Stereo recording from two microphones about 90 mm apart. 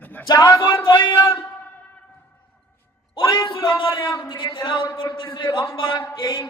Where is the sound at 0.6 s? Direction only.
60° left (ahead or behind).